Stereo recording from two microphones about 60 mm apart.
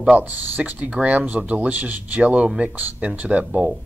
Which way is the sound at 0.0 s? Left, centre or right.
Right.